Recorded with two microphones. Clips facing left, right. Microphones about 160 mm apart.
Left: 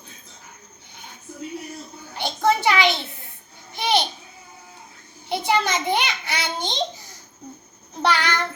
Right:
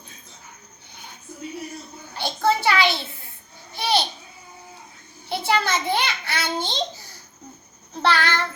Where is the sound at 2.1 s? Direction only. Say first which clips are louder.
Left 1 dB; 20° left (ahead or behind).